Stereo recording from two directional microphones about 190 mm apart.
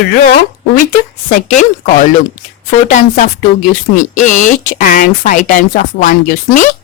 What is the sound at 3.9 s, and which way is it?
Speech, 40° left (ahead or behind).